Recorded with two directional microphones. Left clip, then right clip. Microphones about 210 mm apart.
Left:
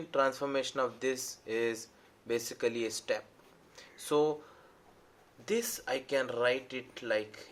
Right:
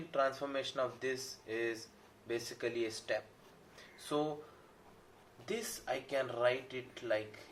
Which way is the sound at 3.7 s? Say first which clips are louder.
Left 7 dB; 55° left (ahead or behind).